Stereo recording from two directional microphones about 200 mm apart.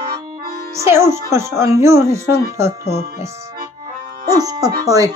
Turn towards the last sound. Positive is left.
turn(degrees=-20)  # may be behind; listen again after turning